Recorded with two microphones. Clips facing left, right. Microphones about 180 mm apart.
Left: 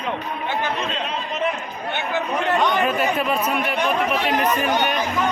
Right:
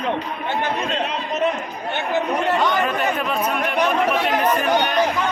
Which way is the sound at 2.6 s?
5° left (ahead or behind).